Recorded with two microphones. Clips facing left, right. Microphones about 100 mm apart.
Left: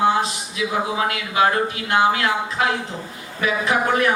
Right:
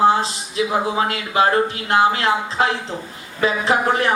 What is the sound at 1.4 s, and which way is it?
A man's voice, 30° right (ahead or behind).